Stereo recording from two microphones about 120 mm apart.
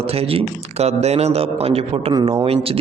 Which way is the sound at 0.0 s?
55° right (ahead or behind).